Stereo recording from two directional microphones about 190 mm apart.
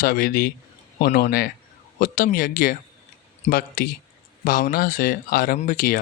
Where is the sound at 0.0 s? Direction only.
50° left (ahead or behind).